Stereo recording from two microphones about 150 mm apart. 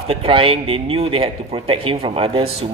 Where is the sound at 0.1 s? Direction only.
40° right (ahead or behind).